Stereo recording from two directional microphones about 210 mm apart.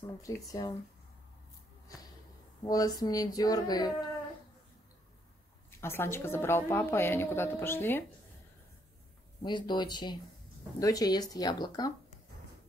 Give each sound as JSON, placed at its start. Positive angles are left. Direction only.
{"t": 0.0, "sound": "speech", "side_deg": 15}
{"t": 2.6, "sound": "a woman's voice", "side_deg": 15}
{"t": 5.8, "sound": "a woman's voice", "side_deg": 10}
{"t": 9.4, "sound": "speech", "side_deg": 20}